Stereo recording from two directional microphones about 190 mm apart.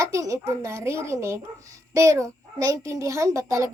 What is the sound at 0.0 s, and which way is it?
A child's voice, 15° right (ahead or behind).